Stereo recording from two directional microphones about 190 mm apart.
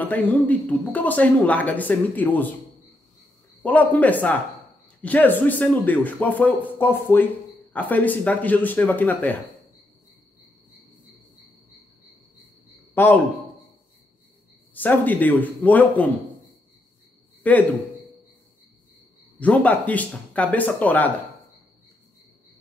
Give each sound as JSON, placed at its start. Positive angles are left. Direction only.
{"t": 0.0, "sound": "speech", "side_deg": 10}
{"t": 3.6, "sound": "speech", "side_deg": 10}
{"t": 12.9, "sound": "a man's voice", "side_deg": 10}
{"t": 14.7, "sound": "speech", "side_deg": 10}
{"t": 17.4, "sound": "a sound", "side_deg": 10}
{"t": 19.4, "sound": "speech", "side_deg": 10}